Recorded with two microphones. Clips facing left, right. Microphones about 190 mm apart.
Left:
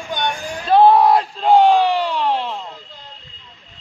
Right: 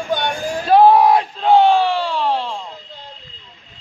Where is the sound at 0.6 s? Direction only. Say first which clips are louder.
Right 1 dB; 10° right (ahead or behind).